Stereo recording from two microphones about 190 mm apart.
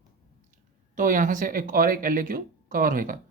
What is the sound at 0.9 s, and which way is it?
Speech, 45° right (ahead or behind).